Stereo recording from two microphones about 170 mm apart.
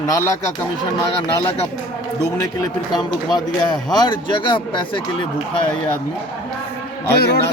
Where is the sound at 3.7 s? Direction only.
25° left (ahead or behind).